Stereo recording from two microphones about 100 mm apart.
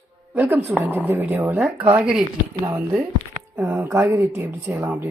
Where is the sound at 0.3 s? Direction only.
20° right (ahead or behind).